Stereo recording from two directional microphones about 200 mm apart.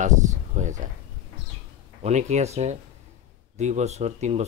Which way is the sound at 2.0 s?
35° right (ahead or behind).